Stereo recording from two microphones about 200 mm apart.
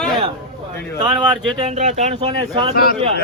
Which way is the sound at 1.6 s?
35° right (ahead or behind).